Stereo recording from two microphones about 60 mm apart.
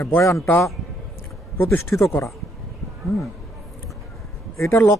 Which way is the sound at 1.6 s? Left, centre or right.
Left.